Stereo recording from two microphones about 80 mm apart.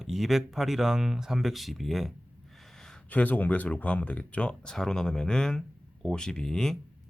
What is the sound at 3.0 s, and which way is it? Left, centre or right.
Speech, centre.